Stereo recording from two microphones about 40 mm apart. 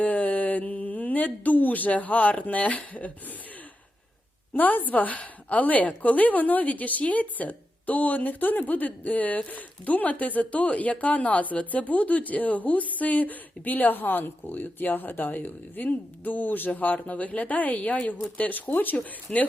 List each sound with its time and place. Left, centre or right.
0.0 s a woman's voice: left
4.5 s a woman's voice: left
18.9 s a woman's voice: left